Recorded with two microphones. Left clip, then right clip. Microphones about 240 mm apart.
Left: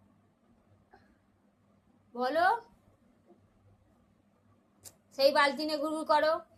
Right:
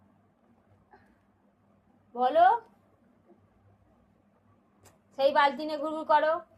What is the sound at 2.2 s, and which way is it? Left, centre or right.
Speech, left.